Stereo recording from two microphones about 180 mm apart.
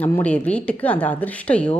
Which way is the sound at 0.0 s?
10° left (ahead or behind).